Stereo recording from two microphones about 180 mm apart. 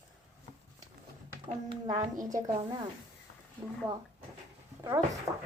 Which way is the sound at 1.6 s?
25° right (ahead or behind).